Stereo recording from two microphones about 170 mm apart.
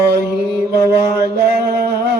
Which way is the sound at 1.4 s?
70° right (ahead or behind).